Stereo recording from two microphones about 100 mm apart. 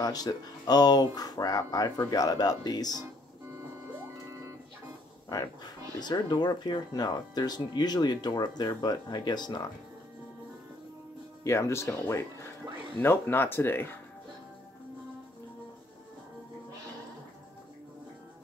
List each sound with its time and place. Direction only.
0.0 s speech: 40° left (ahead or behind)
4.3 s printer: 30° right (ahead or behind)
5.3 s speech: 45° left (ahead or behind)
11.4 s speech: 30° left (ahead or behind)